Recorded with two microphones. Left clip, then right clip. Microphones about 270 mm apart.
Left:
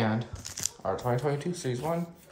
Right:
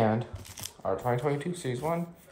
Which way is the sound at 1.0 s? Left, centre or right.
Left.